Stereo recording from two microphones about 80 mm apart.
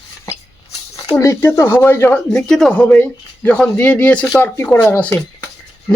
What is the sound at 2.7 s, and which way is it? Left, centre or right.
Speech, centre.